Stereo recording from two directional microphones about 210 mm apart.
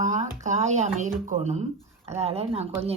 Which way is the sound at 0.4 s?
35° right (ahead or behind).